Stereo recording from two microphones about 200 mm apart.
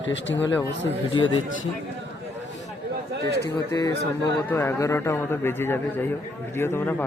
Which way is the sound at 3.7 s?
20° left (ahead or behind).